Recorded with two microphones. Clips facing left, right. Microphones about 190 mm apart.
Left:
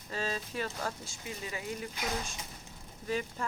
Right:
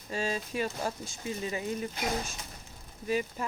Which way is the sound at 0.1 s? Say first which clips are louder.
Right 3 dB; 15° right (ahead or behind).